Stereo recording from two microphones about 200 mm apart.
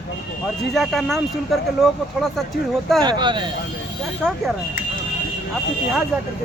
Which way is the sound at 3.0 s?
20° right (ahead or behind).